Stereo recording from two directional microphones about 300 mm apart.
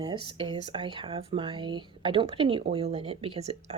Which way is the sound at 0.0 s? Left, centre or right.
Centre.